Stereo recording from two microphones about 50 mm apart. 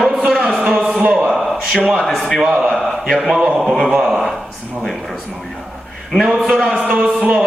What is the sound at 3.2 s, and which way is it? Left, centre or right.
Speech, centre.